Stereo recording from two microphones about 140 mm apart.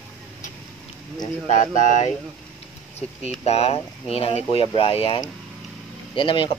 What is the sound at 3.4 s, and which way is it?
Speech, 45° left (ahead or behind).